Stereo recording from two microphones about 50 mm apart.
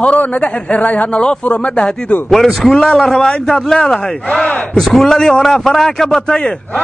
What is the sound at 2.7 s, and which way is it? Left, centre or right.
A man's voice, centre.